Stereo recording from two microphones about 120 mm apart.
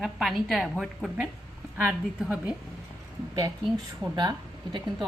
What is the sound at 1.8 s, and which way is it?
Speech, 10° right (ahead or behind).